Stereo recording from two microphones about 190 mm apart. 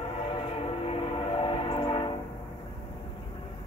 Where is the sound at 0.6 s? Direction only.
30° left (ahead or behind).